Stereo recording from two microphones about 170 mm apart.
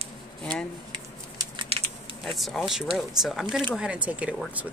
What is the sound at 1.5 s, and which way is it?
Typing, 35° right (ahead or behind).